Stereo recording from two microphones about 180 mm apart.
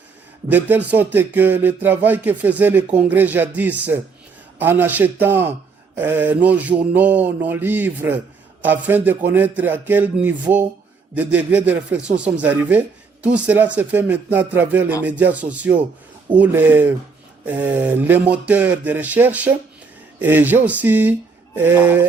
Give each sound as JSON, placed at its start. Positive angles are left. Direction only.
{"t": 0.4, "sound": "speech", "side_deg": -10}